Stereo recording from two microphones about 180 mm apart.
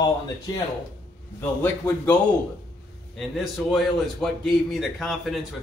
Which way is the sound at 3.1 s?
Centre (ahead or behind).